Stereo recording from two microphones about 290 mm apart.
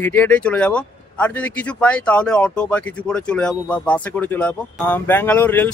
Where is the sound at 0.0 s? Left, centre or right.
Centre.